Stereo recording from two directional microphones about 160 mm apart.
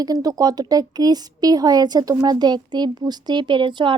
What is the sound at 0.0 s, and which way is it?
Speech, 25° right (ahead or behind).